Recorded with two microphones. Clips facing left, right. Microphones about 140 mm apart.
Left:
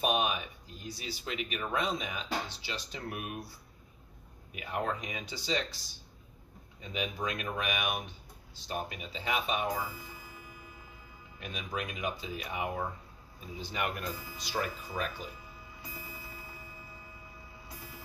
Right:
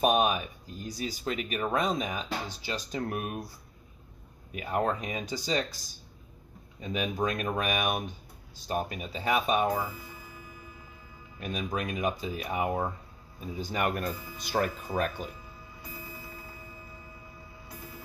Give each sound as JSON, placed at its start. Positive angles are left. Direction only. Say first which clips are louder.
{"t": 0.0, "sound": "speech", "louder": "right 5 dB", "side_deg": -45}
{"t": 4.6, "sound": "speech", "louder": "right 5 dB", "side_deg": -40}
{"t": 6.9, "sound": "speech", "louder": "right 5 dB", "side_deg": -45}
{"t": 11.3, "sound": "speech", "louder": "right 5 dB", "side_deg": -40}